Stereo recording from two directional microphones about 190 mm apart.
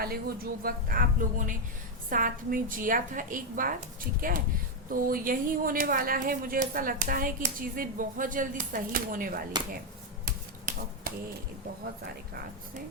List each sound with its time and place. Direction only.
0.0 s a woman's voice: 55° right (ahead or behind)
4.9 s a woman's voice: 50° right (ahead or behind)
10.2 s typewriter: 50° right (ahead or behind)